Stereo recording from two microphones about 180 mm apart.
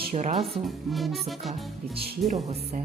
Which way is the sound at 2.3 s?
40° right (ahead or behind).